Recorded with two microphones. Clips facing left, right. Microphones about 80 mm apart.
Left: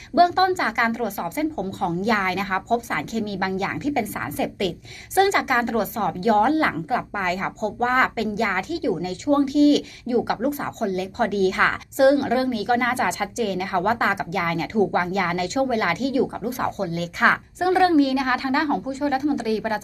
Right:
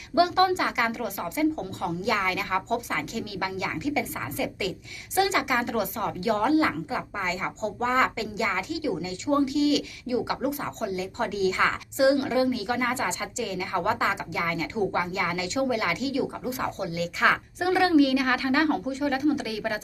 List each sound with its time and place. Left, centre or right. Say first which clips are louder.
0.2 s a woman's voice: left 4 dB; left
10.9 s a woman's voice: left 8 dB; left